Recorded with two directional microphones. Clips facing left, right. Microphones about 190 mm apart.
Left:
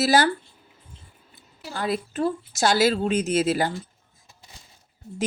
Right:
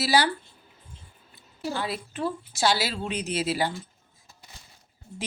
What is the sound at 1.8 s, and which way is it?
Speech, 45° left (ahead or behind).